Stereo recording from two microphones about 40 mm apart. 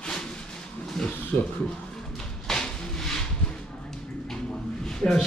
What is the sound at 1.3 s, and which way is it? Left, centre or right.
Speech, left.